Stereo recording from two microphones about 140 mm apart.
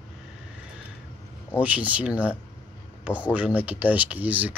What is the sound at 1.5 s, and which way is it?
Speech, 10° right (ahead or behind).